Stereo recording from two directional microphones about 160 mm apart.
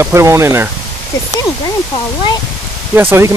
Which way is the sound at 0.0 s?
15° right (ahead or behind).